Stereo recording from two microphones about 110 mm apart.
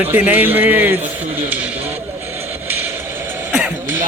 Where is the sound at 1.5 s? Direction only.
15° right (ahead or behind).